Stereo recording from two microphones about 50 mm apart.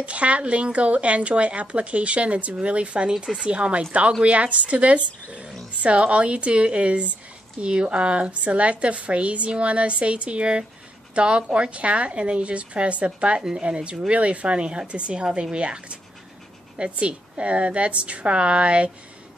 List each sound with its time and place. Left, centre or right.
0.0 s a woman's voice: right